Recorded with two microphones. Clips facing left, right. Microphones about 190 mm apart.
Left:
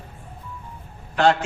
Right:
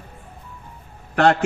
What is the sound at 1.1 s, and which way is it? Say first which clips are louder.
Speech: right 2 dB; 60° right (ahead or behind).